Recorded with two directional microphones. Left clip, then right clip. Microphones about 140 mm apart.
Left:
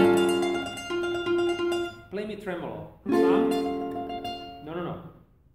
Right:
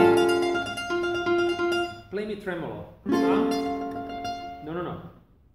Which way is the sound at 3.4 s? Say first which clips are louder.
Even; 10° right (ahead or behind).